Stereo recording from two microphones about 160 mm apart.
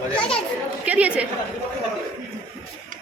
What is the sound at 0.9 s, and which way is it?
Speech, 10° right (ahead or behind).